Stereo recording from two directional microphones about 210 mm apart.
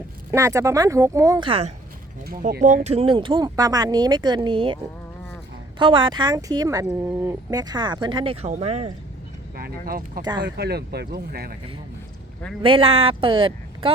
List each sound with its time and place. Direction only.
0.3 s speech: 15° right (ahead or behind)
2.2 s speech: 45° right (ahead or behind); by 4.8 s 25° right (ahead or behind)
5.8 s speech: 25° right (ahead or behind)
9.6 s speech: 45° right (ahead or behind)
12.6 s speech: 25° right (ahead or behind)